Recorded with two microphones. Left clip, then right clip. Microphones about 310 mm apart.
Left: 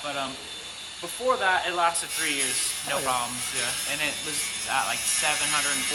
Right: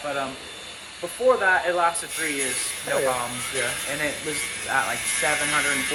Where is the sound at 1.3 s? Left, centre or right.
Centre.